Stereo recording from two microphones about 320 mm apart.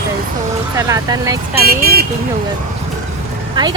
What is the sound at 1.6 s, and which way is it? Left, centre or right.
Speech, right.